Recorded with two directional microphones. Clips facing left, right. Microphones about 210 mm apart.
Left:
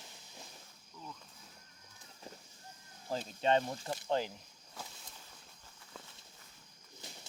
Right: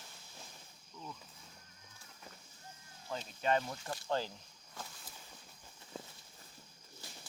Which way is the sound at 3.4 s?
25° left (ahead or behind).